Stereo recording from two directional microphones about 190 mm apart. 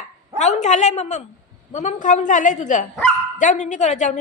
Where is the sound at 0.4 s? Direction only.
35° left (ahead or behind).